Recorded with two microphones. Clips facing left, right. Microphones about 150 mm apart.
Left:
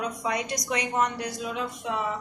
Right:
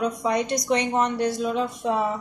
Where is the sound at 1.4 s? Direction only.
40° right (ahead or behind).